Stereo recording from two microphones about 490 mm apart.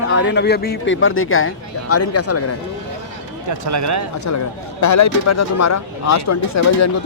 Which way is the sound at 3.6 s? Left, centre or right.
Right.